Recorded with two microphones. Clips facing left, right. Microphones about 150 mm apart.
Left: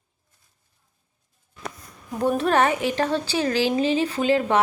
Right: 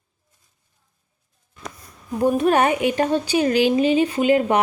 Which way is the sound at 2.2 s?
15° right (ahead or behind).